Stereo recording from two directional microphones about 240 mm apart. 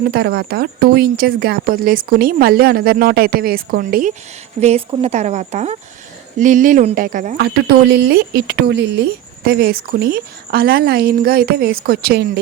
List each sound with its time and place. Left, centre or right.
0.1 s speech: right
4.6 s speech: right